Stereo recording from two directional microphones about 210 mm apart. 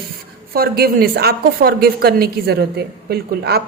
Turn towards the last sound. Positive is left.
turn(degrees=-50)  # may be behind; listen again after turning